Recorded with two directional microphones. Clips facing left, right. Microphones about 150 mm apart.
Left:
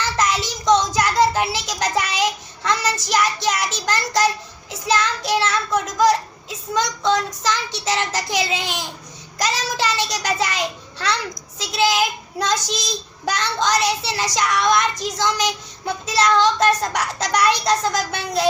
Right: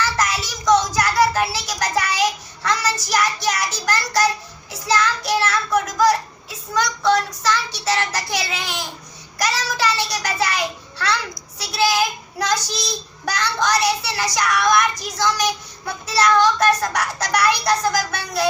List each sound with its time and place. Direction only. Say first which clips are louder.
0.0 s child singing: left 1 dB; 20° left (ahead or behind)
13.2 s child singing: even; 25° left (ahead or behind)